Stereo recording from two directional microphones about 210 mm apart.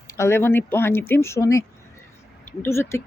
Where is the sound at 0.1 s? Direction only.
10° left (ahead or behind).